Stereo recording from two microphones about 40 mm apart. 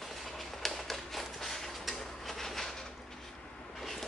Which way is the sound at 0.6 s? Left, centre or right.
Centre.